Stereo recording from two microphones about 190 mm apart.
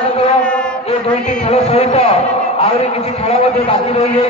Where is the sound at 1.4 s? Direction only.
35° left (ahead or behind).